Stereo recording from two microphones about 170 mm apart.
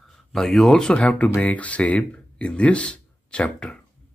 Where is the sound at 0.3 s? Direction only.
Centre (ahead or behind).